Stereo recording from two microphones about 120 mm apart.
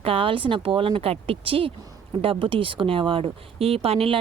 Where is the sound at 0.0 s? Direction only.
50° right (ahead or behind).